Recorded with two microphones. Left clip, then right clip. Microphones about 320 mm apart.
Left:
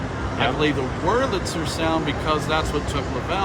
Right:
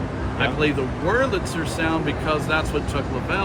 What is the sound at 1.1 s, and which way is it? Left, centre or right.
Speech, centre.